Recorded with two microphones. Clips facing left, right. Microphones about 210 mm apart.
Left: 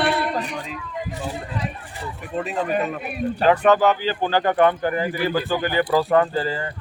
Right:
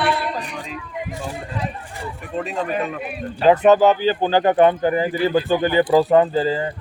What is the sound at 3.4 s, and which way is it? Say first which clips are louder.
Speech: right 4 dB; 20° right (ahead or behind).